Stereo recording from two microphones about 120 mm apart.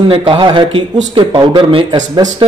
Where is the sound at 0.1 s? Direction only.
45° right (ahead or behind).